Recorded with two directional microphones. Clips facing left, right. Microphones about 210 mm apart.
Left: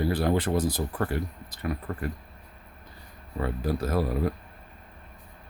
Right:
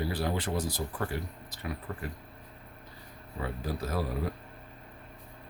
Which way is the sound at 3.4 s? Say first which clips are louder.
Left 6 dB; 55° left (ahead or behind).